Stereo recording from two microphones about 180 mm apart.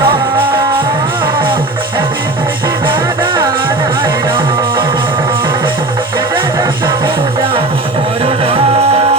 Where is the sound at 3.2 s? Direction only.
25° right (ahead or behind).